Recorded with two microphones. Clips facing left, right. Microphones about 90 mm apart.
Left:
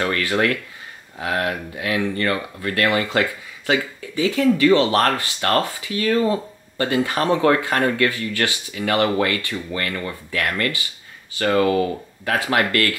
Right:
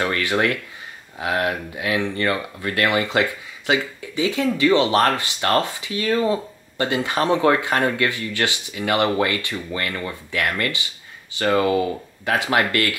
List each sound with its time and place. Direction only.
0.0 s speech: 20° right (ahead or behind)